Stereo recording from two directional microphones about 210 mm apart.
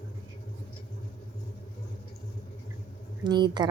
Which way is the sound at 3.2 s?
20° right (ahead or behind).